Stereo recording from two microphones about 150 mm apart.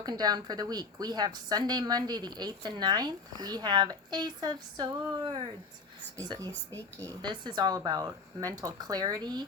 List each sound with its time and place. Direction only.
0.0 s a woman's voice: 25° right (ahead or behind)